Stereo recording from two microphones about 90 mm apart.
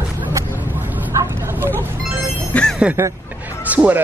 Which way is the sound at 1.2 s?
30° right (ahead or behind).